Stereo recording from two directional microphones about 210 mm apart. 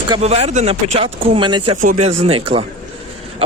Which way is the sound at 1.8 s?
35° right (ahead or behind).